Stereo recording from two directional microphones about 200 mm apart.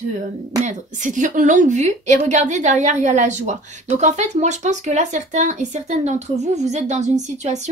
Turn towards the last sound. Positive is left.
turn(degrees=-35)  # may be behind; listen again after turning